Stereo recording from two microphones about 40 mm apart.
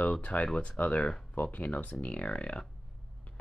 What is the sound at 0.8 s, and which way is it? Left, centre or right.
Speech, left.